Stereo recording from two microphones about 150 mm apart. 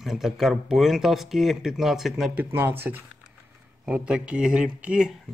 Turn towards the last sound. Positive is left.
turn(degrees=-5)  # may be behind; listen again after turning